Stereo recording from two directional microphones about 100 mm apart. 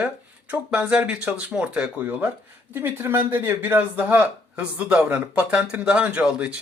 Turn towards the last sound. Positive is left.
turn(degrees=-10)  # may be behind; listen again after turning